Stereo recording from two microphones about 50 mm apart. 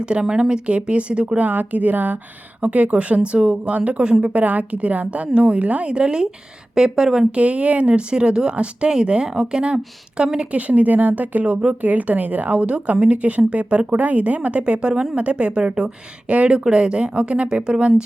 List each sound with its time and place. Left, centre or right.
0.0 s a woman's voice: centre
1.5 s a woman's voice: right; by 7.3 s centre
7.3 s a woman's voice: right